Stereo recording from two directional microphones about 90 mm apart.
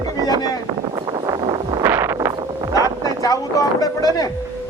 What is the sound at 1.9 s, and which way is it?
Wind noise, 25° right (ahead or behind).